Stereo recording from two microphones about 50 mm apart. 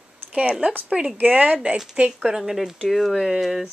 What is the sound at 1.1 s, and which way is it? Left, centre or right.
Speech, right.